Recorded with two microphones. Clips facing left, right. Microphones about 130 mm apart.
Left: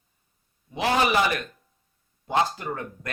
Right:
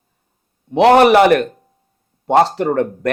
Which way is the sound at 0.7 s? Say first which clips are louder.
Right 14 dB; 70° right (ahead or behind).